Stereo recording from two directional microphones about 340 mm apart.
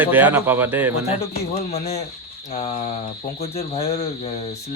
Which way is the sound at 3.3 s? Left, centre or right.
Centre.